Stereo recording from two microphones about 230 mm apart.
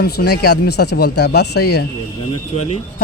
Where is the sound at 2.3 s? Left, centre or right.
Left.